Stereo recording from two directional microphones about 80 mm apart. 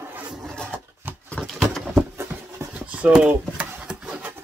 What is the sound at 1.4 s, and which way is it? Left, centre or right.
Pigeon, centre.